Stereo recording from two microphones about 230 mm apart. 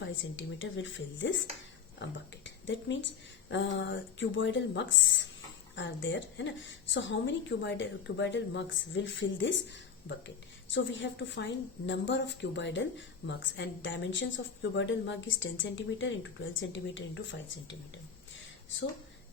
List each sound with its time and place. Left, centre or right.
0.0 s a woman's voice: left